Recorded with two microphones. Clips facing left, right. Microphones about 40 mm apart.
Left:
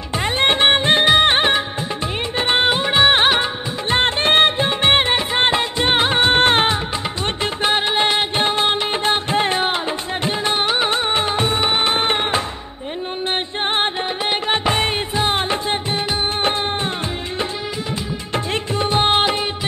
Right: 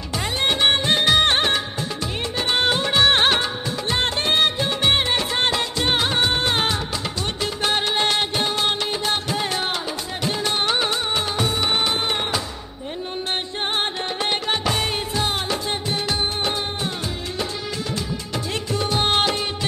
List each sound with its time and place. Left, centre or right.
0.2 s music of bollywood: left
3.9 s music: left
6.3 s music: left
7.6 s music: left
10.9 s music of bollywood: left
11.8 s music: left
14.5 s music: left
18.3 s music of bollywood: left